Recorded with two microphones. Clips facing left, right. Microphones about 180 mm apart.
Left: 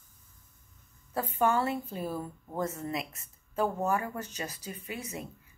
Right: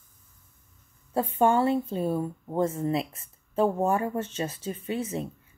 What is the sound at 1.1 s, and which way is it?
Speech, 25° right (ahead or behind).